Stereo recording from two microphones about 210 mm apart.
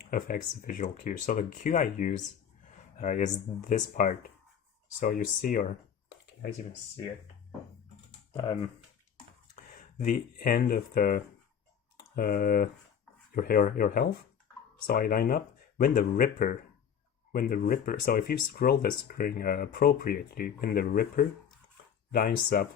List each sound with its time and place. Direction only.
0.1 s speech: 40° left (ahead or behind)
8.3 s speech: 20° left (ahead or behind)
9.6 s speech: 40° left (ahead or behind)